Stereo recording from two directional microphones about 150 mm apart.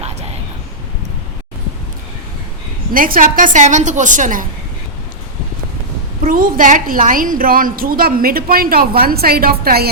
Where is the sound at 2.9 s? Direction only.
70° right (ahead or behind).